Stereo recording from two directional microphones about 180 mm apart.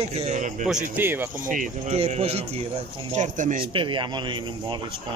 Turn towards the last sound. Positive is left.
turn(degrees=-25)  # may be behind; listen again after turning